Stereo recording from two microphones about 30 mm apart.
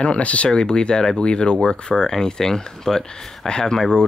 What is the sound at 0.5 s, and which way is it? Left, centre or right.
Speech, left.